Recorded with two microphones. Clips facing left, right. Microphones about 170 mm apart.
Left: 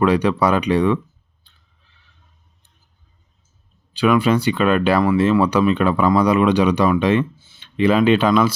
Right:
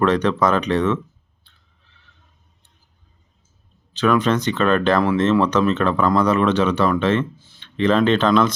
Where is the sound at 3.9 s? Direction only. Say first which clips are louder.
Left 2 dB; 10° left (ahead or behind).